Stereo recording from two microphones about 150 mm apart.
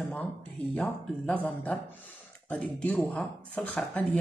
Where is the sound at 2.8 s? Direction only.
5° left (ahead or behind).